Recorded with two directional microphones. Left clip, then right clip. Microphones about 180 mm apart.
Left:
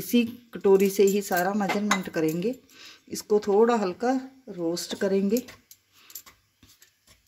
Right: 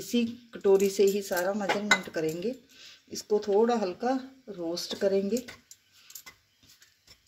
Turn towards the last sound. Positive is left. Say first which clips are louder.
# left 2 dB
turn(degrees=45)  # may be behind; listen again after turning